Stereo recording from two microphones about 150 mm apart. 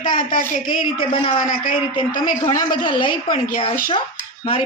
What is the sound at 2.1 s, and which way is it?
Speech, 65° left (ahead or behind).